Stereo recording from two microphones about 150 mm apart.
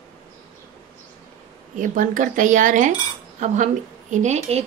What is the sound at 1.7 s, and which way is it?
A woman's voice, 60° right (ahead or behind).